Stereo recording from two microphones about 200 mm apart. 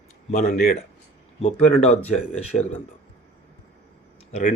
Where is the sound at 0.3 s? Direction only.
35° left (ahead or behind).